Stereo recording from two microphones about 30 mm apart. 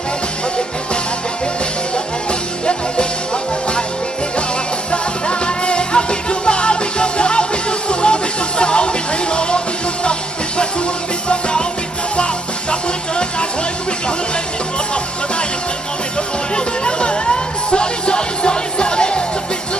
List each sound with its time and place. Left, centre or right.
4.9 s music: left
11.3 s music: left
16.1 s music: left